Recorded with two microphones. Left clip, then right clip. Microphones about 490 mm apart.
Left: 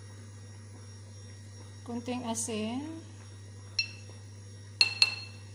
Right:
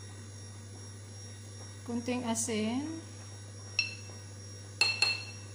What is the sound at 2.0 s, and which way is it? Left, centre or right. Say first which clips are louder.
Speech: right 1 dB; left.